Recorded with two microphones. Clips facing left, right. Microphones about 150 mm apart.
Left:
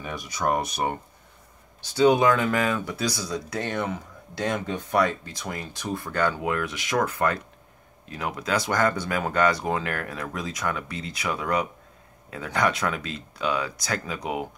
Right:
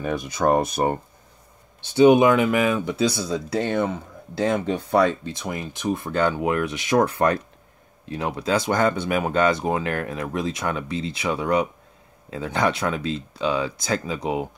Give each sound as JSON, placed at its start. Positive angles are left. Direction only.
{"t": 0.0, "sound": "speech", "side_deg": -50}
{"t": 2.0, "sound": "speech", "side_deg": -20}